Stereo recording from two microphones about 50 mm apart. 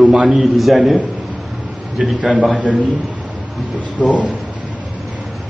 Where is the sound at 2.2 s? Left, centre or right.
Right.